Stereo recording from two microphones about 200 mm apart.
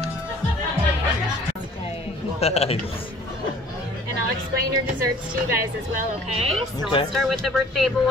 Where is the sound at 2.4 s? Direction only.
30° left (ahead or behind).